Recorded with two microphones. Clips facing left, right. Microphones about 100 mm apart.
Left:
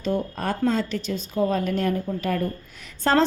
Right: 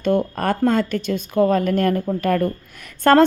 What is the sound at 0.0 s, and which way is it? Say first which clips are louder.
A woman's voice: right 6 dB; 60° right (ahead or behind).